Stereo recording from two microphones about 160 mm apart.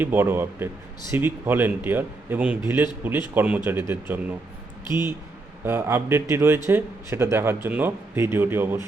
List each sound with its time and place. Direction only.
0.0 s speech: 15° right (ahead or behind)
5.6 s speech: 15° right (ahead or behind)